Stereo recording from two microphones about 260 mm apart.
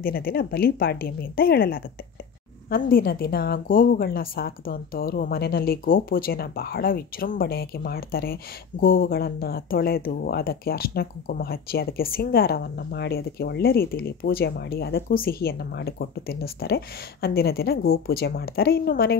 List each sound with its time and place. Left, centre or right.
0.0 s a woman's voice: left